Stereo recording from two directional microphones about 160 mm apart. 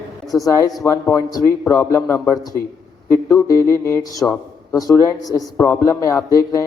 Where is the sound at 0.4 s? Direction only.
20° left (ahead or behind).